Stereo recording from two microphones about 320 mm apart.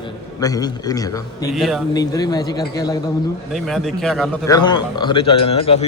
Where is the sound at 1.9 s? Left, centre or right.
Centre.